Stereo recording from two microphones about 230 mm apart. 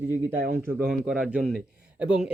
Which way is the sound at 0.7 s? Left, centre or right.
Centre.